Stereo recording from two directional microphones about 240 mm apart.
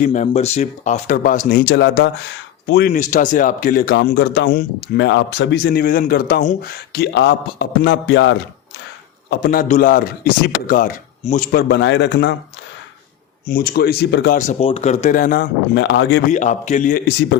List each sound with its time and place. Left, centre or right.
0.0 s speech: left
2.9 s a man's voice: left
13.5 s speech: left
14.3 s speech: left
16.3 s speech: left